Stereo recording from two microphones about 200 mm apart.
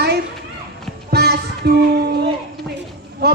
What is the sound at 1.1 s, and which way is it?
Music, 55° right (ahead or behind).